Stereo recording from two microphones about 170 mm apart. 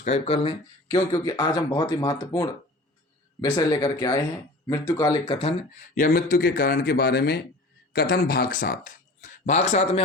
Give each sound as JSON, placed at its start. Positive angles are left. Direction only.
{"t": 0.0, "sound": "speech", "side_deg": 35}
{"t": 0.9, "sound": "speech", "side_deg": 25}
{"t": 5.2, "sound": "speech", "side_deg": 35}
{"t": 5.9, "sound": "a man's voice", "side_deg": 55}